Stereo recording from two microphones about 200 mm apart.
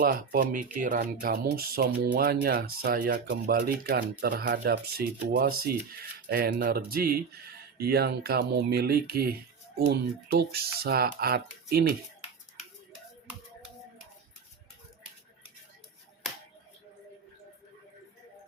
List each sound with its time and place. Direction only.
0.0 s speech: 45° right (ahead or behind)